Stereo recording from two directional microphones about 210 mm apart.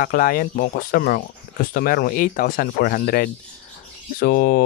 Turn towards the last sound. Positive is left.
turn(degrees=45)  # may be behind; listen again after turning